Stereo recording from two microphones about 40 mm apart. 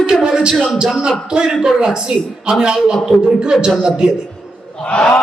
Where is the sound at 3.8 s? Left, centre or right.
Centre.